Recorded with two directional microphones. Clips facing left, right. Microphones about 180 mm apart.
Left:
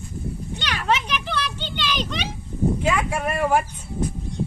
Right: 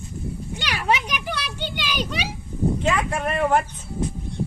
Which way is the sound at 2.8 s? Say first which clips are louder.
Even; 5° left (ahead or behind).